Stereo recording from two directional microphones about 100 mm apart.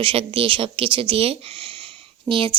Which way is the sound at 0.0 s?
60° right (ahead or behind).